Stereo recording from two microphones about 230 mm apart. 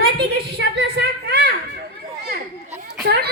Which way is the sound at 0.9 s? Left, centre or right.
Right.